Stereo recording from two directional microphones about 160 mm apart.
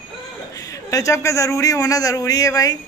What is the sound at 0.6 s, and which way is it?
A man's voice, 20° left (ahead or behind).